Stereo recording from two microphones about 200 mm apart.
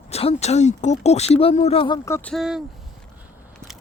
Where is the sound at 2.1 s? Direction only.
5° left (ahead or behind).